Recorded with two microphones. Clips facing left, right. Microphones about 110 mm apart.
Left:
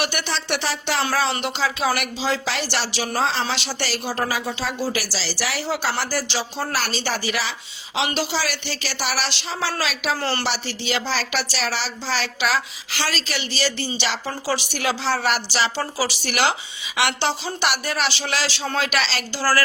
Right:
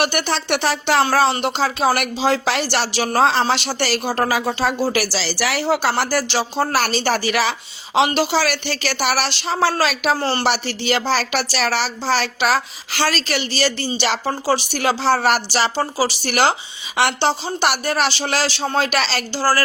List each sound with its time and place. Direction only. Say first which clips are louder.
0.0 s speech: right 5 dB; 50° right (ahead or behind)
1.3 s speech: right 4 dB; 40° right (ahead or behind)
10.2 s a woman's voice: right 4 dB; 30° right (ahead or behind)
10.4 s speech: right 6 dB; 55° right (ahead or behind)
15.7 s speech: right 5 dB; 30° right (ahead or behind)